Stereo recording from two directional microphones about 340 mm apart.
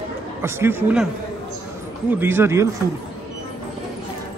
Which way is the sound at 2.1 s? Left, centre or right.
Centre.